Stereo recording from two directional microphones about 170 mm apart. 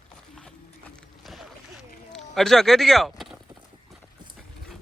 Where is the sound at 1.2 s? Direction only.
Centre (ahead or behind).